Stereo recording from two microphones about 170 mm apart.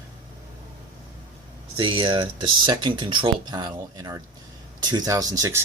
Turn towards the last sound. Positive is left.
turn(degrees=-20)  # may be behind; listen again after turning